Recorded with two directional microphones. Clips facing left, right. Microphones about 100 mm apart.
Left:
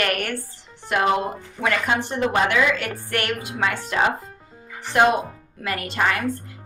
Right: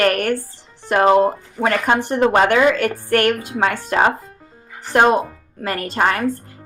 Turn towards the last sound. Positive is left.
turn(degrees=-40)  # may be behind; listen again after turning